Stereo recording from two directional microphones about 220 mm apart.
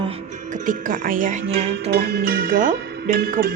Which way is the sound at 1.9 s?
45° right (ahead or behind).